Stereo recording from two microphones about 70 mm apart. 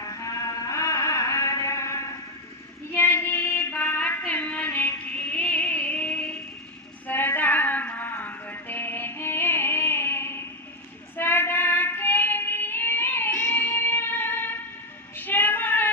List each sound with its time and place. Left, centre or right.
0.0 s music: left
2.9 s child singing: left
4.3 s music: left
7.1 s female singing: left
11.1 s child singing: left
15.1 s a sound: left